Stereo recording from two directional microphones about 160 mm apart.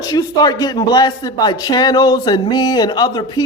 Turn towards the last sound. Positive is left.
turn(degrees=25)  # may be behind; listen again after turning